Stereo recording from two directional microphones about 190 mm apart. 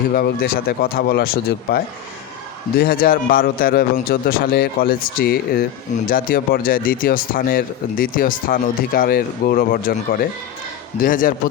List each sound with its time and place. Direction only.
0.1 s speech: 55° left (ahead or behind)